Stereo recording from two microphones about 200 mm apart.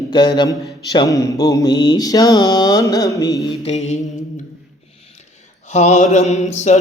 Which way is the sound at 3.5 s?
30° left (ahead or behind).